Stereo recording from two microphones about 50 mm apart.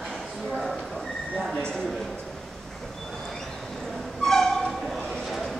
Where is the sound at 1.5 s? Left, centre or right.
Centre.